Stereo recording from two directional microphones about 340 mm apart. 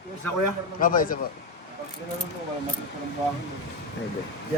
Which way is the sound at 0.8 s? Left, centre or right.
Left.